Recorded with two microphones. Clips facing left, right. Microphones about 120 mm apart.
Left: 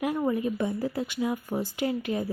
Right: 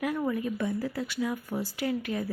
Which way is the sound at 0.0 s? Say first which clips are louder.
Left 3 dB; 25° left (ahead or behind).